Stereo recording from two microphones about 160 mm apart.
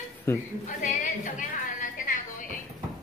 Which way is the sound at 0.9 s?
55° left (ahead or behind).